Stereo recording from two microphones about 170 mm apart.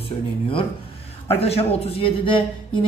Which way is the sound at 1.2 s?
35° left (ahead or behind).